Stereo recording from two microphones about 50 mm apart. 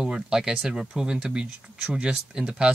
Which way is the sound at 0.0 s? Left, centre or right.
Centre.